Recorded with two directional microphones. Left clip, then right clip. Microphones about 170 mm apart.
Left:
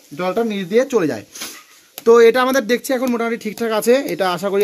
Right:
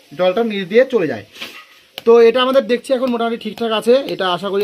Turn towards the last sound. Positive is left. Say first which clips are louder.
# even
turn(degrees=20)  # may be behind; listen again after turning